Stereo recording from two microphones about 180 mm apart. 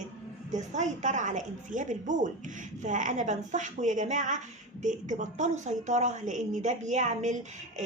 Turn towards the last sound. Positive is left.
turn(degrees=-40)  # may be behind; listen again after turning